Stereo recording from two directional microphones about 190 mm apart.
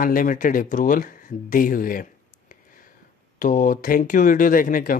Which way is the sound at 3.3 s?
45° left (ahead or behind).